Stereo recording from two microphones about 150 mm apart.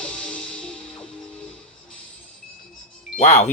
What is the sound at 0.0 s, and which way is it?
Music, 5° left (ahead or behind).